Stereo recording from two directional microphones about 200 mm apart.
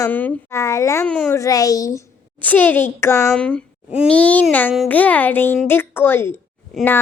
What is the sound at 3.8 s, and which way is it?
Speech, 5° right (ahead or behind).